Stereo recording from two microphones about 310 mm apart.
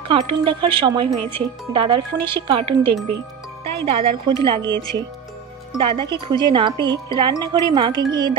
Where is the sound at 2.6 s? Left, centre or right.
Right.